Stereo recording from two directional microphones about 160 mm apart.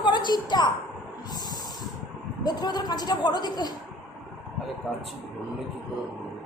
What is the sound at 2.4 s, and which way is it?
A woman's voice, 25° left (ahead or behind).